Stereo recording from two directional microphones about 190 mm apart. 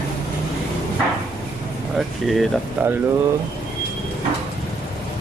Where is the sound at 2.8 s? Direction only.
5° right (ahead or behind).